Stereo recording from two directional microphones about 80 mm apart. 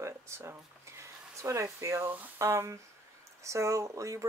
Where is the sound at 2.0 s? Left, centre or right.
Right.